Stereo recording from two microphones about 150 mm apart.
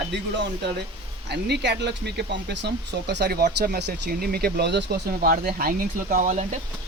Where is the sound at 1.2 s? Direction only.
90° right; by 6.5 s 55° right (ahead or behind).